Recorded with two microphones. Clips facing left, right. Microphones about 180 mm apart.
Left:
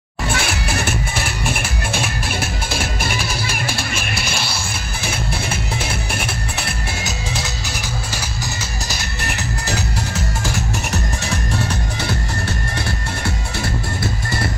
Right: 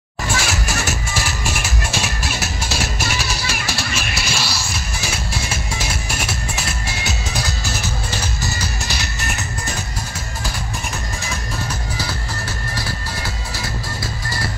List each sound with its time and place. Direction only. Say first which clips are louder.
0.4 s music: left 1 dB; 55° left (ahead or behind)